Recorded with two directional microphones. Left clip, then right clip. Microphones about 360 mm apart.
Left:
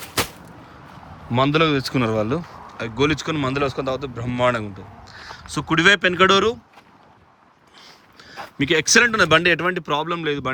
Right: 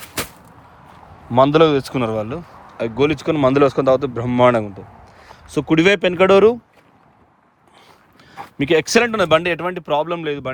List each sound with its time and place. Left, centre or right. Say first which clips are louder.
1.3 s speech: right 6 dB; centre
7.8 s speech: left 3 dB; centre